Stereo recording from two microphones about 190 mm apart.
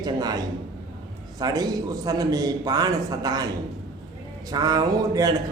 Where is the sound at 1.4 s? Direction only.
20° right (ahead or behind).